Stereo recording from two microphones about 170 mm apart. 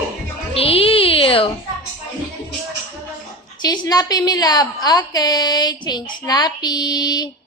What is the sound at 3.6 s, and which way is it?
A woman's voice, 25° left (ahead or behind).